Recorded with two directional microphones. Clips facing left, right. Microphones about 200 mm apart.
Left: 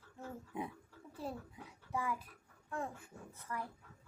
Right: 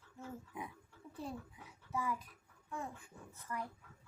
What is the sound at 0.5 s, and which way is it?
Speech, 30° left (ahead or behind).